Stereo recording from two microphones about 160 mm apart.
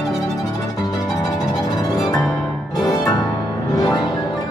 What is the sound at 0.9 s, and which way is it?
Music, 25° left (ahead or behind).